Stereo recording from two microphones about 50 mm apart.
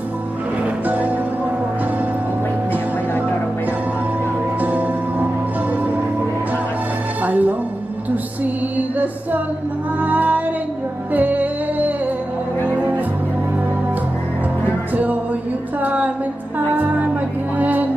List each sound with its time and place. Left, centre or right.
0.8 s music: right
4.6 s music: right
7.2 s music: right
8.7 s music: right
10.0 s female singing: right
11.1 s music: right
15.8 s music: right
17.6 s music: right